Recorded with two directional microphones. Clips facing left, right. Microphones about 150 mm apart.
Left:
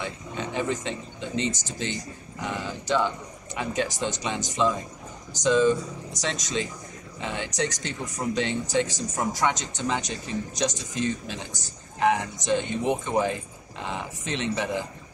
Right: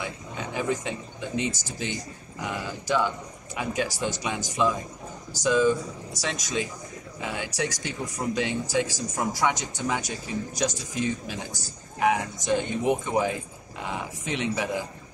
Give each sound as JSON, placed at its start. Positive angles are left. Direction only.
{"t": 0.6, "sound": "speech", "side_deg": -10}